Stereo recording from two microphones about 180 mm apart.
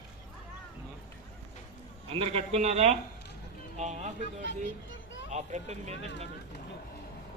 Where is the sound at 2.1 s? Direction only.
35° right (ahead or behind).